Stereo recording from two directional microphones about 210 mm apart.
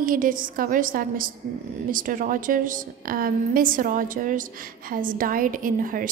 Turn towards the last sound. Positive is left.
turn(degrees=-40)  # may be behind; listen again after turning